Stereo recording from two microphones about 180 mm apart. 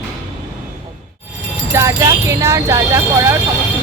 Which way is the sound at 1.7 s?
15° right (ahead or behind).